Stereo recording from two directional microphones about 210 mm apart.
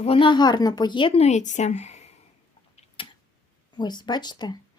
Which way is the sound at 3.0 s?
25° left (ahead or behind).